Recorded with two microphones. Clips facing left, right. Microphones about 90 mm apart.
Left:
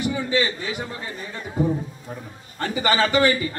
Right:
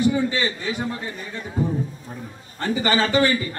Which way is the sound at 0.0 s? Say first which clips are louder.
Right 2 dB; 35° right (ahead or behind).